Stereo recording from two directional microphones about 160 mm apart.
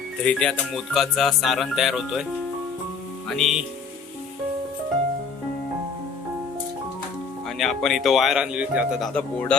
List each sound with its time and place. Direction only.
0.3 s music: 5° left (ahead or behind)
3.2 s music: centre (ahead or behind)
7.6 s music: centre (ahead or behind)